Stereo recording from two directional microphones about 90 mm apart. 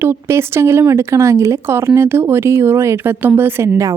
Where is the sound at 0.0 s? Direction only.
25° right (ahead or behind).